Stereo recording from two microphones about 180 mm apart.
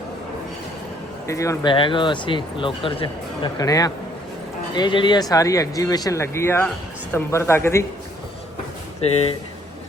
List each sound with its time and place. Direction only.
1.3 s speech: 15° left (ahead or behind)
1.7 s speech: 30° left (ahead or behind)